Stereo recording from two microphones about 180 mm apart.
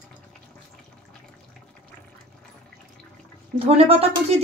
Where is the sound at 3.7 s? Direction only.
35° right (ahead or behind).